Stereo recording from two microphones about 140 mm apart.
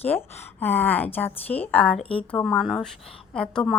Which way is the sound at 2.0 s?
40° left (ahead or behind).